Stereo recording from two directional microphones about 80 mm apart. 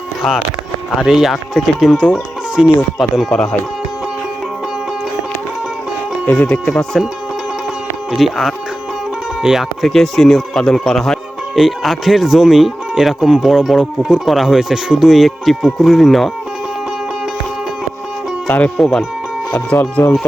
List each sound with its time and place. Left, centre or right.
0.9 s speech: centre
3.3 s speech: centre
6.2 s speech: centre
8.1 s speech: centre
18.4 s speech: centre
18.8 s speech: centre
19.5 s speech: left